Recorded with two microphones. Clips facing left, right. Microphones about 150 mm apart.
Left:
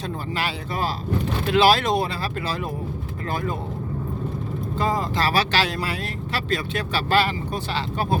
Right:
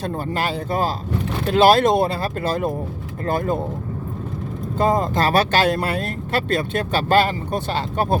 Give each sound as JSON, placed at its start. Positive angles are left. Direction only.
{"t": 0.3, "sound": "speech", "side_deg": -45}
{"t": 4.8, "sound": "speech", "side_deg": -50}